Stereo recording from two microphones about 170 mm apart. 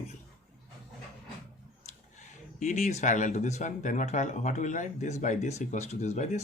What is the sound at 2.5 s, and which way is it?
Speech, 45° left (ahead or behind).